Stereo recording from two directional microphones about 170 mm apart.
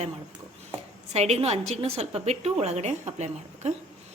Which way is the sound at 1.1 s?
40° right (ahead or behind).